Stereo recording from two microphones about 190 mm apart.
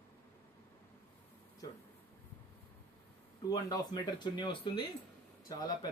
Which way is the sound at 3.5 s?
20° left (ahead or behind).